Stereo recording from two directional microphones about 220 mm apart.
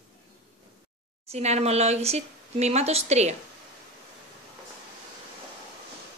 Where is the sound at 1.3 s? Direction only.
30° right (ahead or behind).